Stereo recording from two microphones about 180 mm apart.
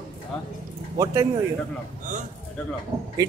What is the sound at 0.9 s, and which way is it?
Speech, 20° right (ahead or behind).